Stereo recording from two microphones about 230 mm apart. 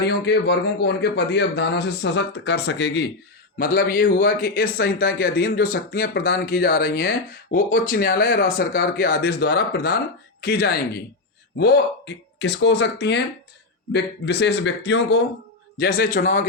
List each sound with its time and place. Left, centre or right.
0.0 s a man's voice: left
3.6 s a man's voice: left